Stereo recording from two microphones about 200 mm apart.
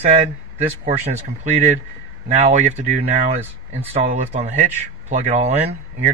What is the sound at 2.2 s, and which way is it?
Speech, 35° right (ahead or behind).